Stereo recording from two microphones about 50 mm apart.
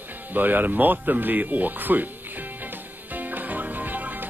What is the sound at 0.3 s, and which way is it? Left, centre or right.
Speech, right.